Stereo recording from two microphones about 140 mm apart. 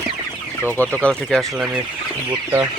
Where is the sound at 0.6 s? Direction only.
15° left (ahead or behind).